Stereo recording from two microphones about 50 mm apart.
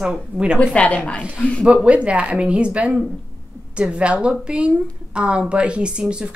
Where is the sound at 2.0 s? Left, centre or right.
Right.